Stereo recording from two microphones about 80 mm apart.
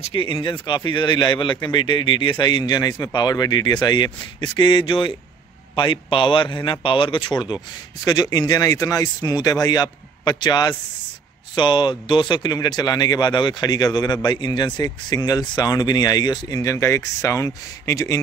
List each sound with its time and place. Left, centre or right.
0.1 s speech: left
8.0 s speech: left
11.5 s speech: left
12.6 s speech: left